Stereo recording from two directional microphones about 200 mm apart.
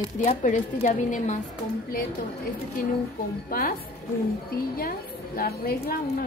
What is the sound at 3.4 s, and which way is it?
Speech, 45° left (ahead or behind).